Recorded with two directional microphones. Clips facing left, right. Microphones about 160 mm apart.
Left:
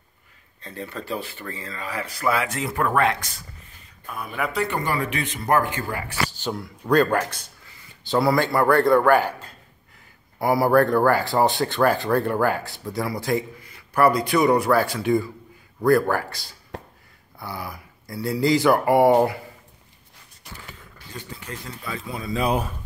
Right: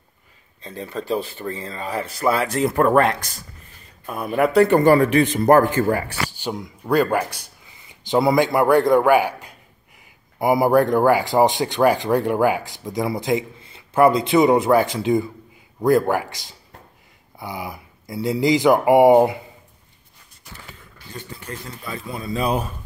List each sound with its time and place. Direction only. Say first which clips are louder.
0.7 s speech: right 5 dB; 20° right (ahead or behind); by 6.1 s 40° right (ahead or behind)
6.3 s speech: right 1 dB; 15° right (ahead or behind)
21.5 s speech: right 3 dB; 45° right (ahead or behind)